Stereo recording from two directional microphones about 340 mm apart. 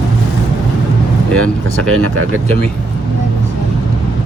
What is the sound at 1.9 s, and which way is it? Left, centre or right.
Speech, right.